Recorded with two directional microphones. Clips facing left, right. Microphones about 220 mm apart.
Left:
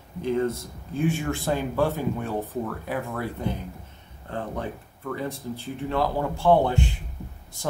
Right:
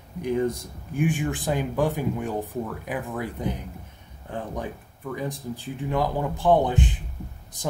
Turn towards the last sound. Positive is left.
turn(degrees=-15)  # may be behind; listen again after turning